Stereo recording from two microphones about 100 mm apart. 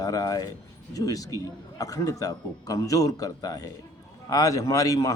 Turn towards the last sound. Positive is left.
turn(degrees=35)  # may be behind; listen again after turning